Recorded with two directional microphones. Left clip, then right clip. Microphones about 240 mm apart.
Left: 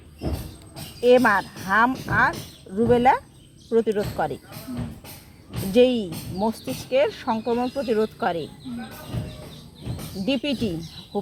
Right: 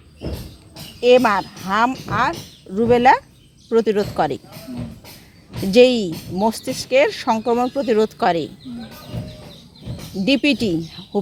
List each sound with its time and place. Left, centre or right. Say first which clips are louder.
1.0 s speech: right 3 dB; right
5.7 s speech: right 6 dB; right
10.2 s speech: right 8 dB; right